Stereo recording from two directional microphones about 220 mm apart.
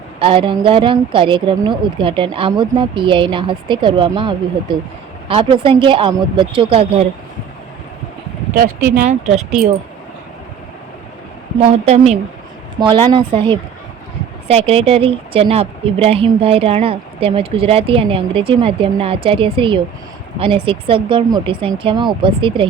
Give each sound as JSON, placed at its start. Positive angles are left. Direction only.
{"t": 0.2, "sound": "a woman's voice", "side_deg": -25}
{"t": 8.5, "sound": "speech", "side_deg": -45}
{"t": 9.0, "sound": "a woman's voice", "side_deg": -30}
{"t": 11.6, "sound": "a woman's voice", "side_deg": -30}